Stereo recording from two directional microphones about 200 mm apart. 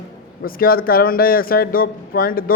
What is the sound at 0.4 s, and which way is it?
A man's voice, 45° left (ahead or behind).